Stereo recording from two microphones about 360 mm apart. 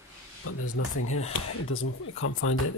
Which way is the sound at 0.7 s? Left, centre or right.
Left.